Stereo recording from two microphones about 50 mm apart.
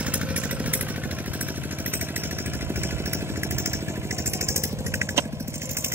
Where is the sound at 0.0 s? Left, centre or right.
Right.